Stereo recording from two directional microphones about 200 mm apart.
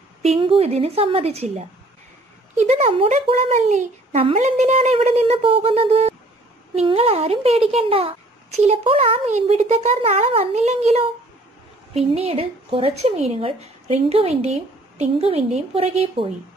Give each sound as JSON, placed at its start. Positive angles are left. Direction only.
{"t": 0.2, "sound": "speech", "side_deg": -30}